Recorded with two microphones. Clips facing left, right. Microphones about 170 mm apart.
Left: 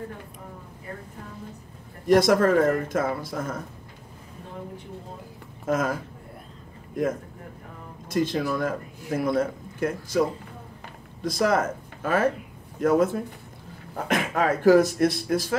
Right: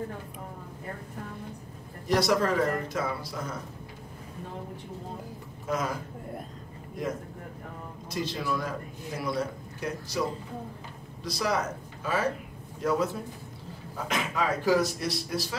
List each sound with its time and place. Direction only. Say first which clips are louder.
2.0 s a man's voice: left 6 dB; 50° left (ahead or behind)
5.7 s a man's voice: left 5 dB; 50° left (ahead or behind)
8.1 s a man's voice: left 7 dB; 50° left (ahead or behind)
11.2 s a man's voice: left 6 dB; 50° left (ahead or behind)